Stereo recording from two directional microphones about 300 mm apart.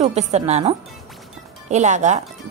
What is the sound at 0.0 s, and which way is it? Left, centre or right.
Speech, right.